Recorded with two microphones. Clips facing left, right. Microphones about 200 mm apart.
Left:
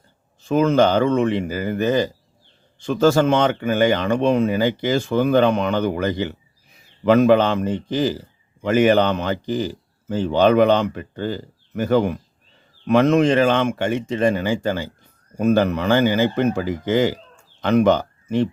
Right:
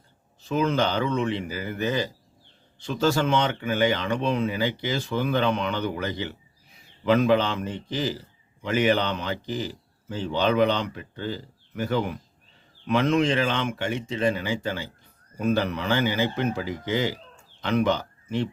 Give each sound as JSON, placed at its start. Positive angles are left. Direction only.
{"t": 0.4, "sound": "speech", "side_deg": 45}